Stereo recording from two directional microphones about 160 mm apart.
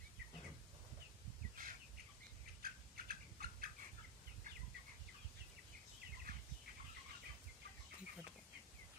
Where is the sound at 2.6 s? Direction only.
65° right (ahead or behind).